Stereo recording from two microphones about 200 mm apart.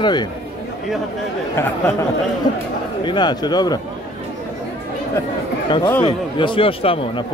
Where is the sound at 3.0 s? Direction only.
20° left (ahead or behind).